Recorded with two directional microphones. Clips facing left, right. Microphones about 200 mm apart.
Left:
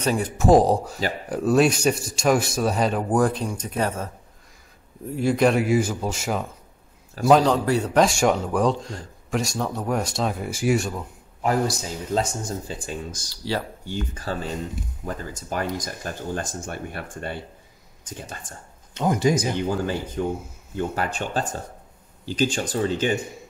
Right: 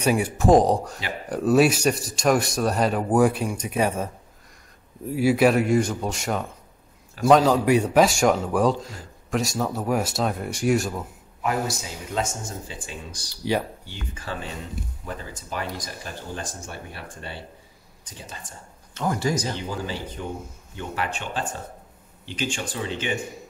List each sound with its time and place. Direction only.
0.0 s speech: 10° right (ahead or behind)
0.4 s speech: 5° left (ahead or behind); by 4.1 s 10° right (ahead or behind)
5.1 s speech: 5° right (ahead or behind)
7.6 s speech: 15° right (ahead or behind)
8.0 s speech: centre (ahead or behind)
11.4 s speech: 35° left (ahead or behind)
13.3 s speech: 15° right (ahead or behind)
13.8 s speech: 40° left (ahead or behind)
18.9 s speech: 20° left (ahead or behind)
20.7 s speech: 40° left (ahead or behind)